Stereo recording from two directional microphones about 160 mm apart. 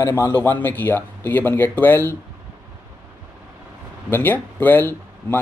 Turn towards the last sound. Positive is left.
turn(degrees=10)  # may be behind; listen again after turning